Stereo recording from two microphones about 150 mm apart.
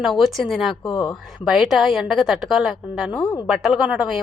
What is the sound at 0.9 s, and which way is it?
Speech, 30° left (ahead or behind).